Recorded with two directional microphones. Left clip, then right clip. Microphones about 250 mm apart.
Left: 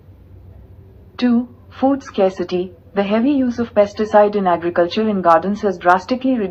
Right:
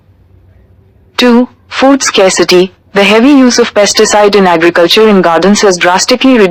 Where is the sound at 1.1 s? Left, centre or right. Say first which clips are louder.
Right 13 dB; right.